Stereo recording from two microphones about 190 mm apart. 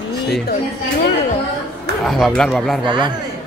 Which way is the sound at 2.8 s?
25° right (ahead or behind).